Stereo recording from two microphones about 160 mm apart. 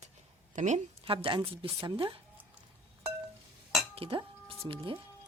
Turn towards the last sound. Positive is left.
turn(degrees=-30)  # may be behind; listen again after turning